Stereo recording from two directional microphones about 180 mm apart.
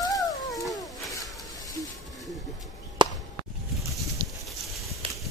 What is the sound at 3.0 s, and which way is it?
Chop, 25° right (ahead or behind).